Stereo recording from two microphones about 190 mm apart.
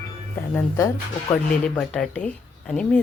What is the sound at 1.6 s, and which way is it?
Speech, 5° left (ahead or behind).